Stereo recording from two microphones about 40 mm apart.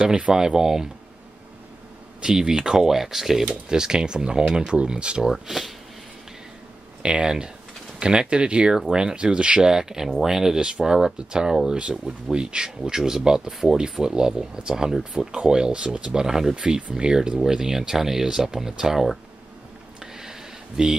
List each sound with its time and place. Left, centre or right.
0.0 s speech: right
0.3 s speech: centre
2.2 s speech: centre
3.4 s speech: centre
5.3 s speech: centre
7.0 s speech: right
16.1 s speech: centre
16.5 s speech: right
20.2 s a sound: centre